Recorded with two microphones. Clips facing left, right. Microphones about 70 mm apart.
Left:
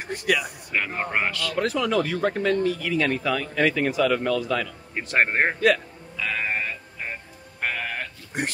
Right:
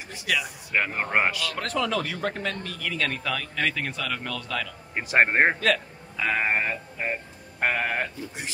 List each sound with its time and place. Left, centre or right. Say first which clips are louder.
0.0 s speech: left 8 dB; left
0.3 s speech: left 3 dB; centre
0.7 s speech: right 1 dB; centre
1.5 s speech: left 4 dB; centre
5.0 s speech: right 2 dB; centre
6.1 s sheep: right 3 dB; centre
8.4 s speech: left 10 dB; left